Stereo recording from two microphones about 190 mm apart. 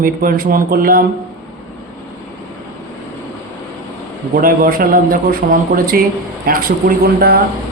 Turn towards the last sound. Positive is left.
turn(degrees=-55)  # may be behind; listen again after turning